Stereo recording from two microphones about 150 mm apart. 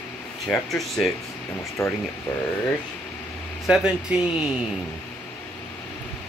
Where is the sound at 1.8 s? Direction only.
20° left (ahead or behind).